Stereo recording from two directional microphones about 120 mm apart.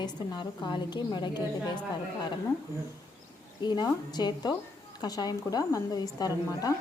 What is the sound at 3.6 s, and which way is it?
A woman's voice, 40° left (ahead or behind).